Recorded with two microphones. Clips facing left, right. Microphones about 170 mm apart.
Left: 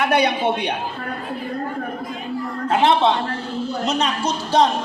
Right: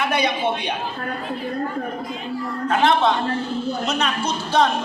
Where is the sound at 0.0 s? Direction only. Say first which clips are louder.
Left 3 dB; 60° left (ahead or behind).